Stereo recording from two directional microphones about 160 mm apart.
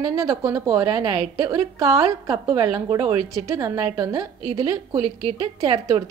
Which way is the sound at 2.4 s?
30° right (ahead or behind).